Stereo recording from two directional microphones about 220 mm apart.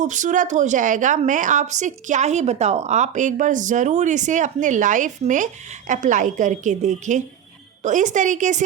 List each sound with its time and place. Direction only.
0.0 s a woman's voice: 35° right (ahead or behind)